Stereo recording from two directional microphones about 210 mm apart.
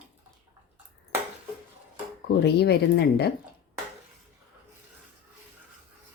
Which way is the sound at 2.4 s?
50° left (ahead or behind).